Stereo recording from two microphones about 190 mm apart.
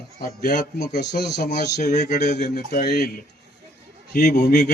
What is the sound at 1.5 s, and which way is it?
Speech, 40° left (ahead or behind).